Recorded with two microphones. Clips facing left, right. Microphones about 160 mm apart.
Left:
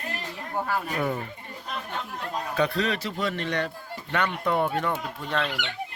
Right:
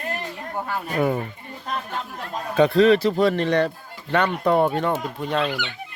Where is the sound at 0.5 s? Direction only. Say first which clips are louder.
Left 1 dB; centre (ahead or behind).